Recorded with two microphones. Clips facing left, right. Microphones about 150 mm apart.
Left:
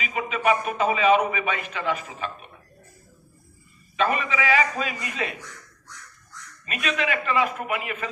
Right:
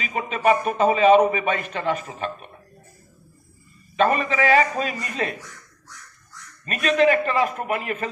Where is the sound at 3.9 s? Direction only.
40° right (ahead or behind).